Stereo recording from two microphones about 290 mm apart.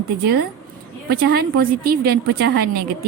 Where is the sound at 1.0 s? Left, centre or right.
Right.